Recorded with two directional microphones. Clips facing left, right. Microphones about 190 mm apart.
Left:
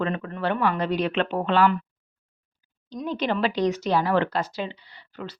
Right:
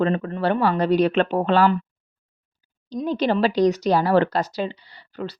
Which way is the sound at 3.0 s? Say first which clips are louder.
Right 4 dB; 35° right (ahead or behind).